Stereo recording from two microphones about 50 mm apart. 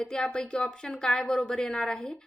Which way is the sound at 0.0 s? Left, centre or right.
Centre.